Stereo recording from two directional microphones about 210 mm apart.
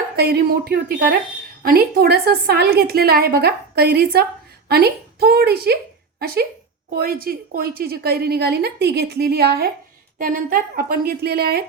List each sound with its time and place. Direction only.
0.2 s a woman's voice: 50° right (ahead or behind)